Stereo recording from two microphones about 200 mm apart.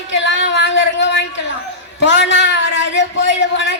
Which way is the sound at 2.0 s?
60° left (ahead or behind).